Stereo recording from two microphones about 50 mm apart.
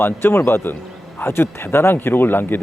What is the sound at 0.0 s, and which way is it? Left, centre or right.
Speech, left.